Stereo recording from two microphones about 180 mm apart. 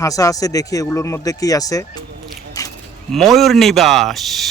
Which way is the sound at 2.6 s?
20° left (ahead or behind).